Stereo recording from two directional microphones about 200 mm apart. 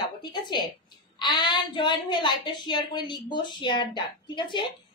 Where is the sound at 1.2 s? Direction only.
20° left (ahead or behind).